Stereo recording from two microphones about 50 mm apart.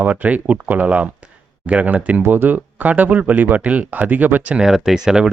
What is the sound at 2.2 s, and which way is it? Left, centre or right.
Speech, right.